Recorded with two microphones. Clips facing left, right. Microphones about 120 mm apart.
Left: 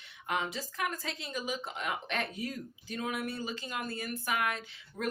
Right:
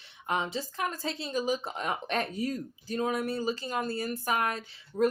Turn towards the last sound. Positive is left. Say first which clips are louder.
# right 9 dB
turn(degrees=-35)  # may be behind; listen again after turning